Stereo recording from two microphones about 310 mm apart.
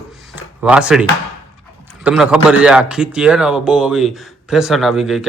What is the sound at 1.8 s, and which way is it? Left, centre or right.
A man's voice, centre.